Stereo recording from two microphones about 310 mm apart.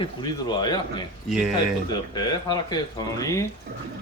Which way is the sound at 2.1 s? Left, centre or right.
Centre.